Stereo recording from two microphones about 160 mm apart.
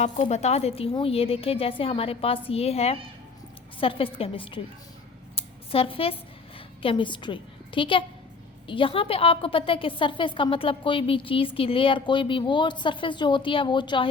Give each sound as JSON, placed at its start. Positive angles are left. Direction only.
{"t": 0.0, "sound": "a woman's voice", "side_deg": 45}
{"t": 5.3, "sound": "a sound", "side_deg": 35}
{"t": 6.8, "sound": "a woman's voice", "side_deg": 30}